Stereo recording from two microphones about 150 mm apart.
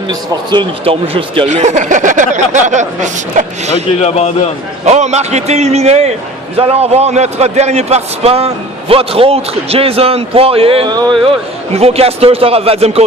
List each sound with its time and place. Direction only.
0.1 s speech: 35° right (ahead or behind); by 3.8 s 50° right (ahead or behind)
4.0 s a man's voice: 45° left (ahead or behind)
4.9 s a man's voice: 50° right (ahead or behind); by 11.2 s 30° right (ahead or behind)
11.7 s a man's voice: 45° right (ahead or behind)